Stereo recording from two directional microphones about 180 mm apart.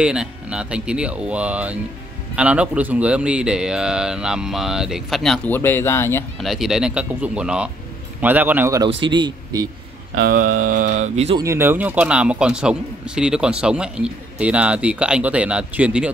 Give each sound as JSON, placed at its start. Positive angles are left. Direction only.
{"t": 0.0, "sound": "a man's voice", "side_deg": -5}
{"t": 6.4, "sound": "a man's voice", "side_deg": 0}
{"t": 9.0, "sound": "speech", "side_deg": -25}
{"t": 10.1, "sound": "speech", "side_deg": -50}
{"t": 11.3, "sound": "a man's voice", "side_deg": -15}